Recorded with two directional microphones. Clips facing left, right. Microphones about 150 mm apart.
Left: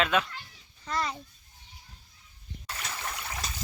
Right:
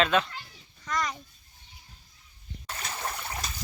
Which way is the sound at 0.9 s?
30° left (ahead or behind).